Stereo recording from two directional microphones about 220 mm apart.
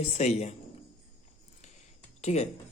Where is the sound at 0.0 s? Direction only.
30° left (ahead or behind).